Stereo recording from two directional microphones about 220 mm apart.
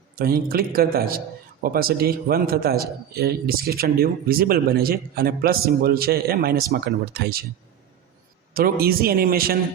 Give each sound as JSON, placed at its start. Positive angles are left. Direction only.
{"t": 0.2, "sound": "a man's voice", "side_deg": -40}
{"t": 8.5, "sound": "a man's voice", "side_deg": -45}